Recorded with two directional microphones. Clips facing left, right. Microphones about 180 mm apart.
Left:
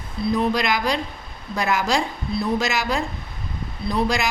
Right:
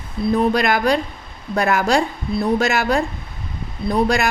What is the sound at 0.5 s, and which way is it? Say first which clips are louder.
Speech: right 5 dB; 55° right (ahead or behind).